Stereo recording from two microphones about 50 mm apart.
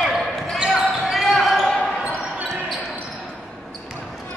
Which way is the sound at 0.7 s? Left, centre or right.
Centre.